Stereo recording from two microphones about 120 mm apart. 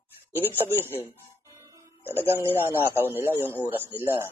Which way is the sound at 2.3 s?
20° right (ahead or behind).